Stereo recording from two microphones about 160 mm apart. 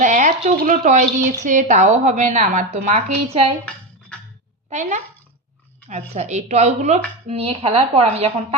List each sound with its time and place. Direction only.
0.0 s a woman's voice: 50° right (ahead or behind)
4.7 s speech: 45° right (ahead or behind)